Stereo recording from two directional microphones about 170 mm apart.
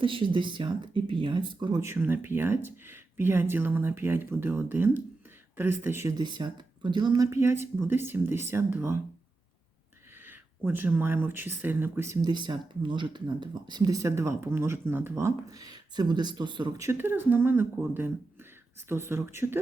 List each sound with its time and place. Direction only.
0.0 s speech: 30° right (ahead or behind); by 9.0 s 15° right (ahead or behind)
10.2 s speech: 10° right (ahead or behind)